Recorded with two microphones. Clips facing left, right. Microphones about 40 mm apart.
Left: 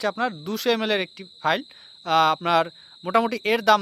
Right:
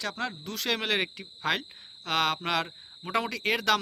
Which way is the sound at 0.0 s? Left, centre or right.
Centre.